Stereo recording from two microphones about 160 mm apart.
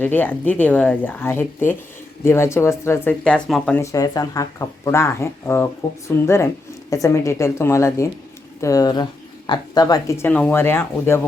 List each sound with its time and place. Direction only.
0.0 s speech: 10° left (ahead or behind)
3.8 s speech: 20° left (ahead or behind)